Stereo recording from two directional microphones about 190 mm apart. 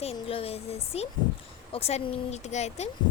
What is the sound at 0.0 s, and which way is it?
Speech, 30° left (ahead or behind).